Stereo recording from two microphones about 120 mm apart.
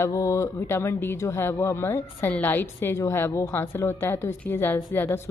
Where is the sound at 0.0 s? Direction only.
25° left (ahead or behind).